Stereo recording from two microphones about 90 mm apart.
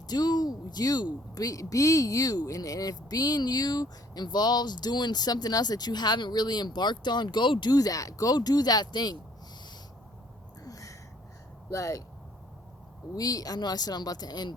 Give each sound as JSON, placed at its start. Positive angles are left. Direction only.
{"t": 0.1, "sound": "a woman's voice", "side_deg": 50}
{"t": 10.6, "sound": "a sound", "side_deg": 40}
{"t": 11.7, "sound": "speech", "side_deg": 40}
{"t": 13.1, "sound": "a woman's voice", "side_deg": 45}